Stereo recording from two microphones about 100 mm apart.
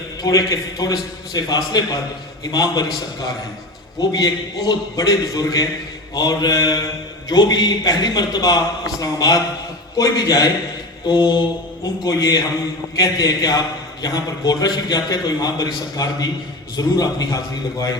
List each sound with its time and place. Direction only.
0.2 s a man's voice: 40° left (ahead or behind)
2.4 s mantra: 40° left (ahead or behind)
4.1 s a man's voice: 40° left (ahead or behind)
11.0 s mantra: 50° left (ahead or behind)
12.0 s a man's voice: 40° left (ahead or behind)